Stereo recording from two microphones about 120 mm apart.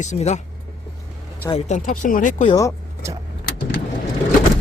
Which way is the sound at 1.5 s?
80° left.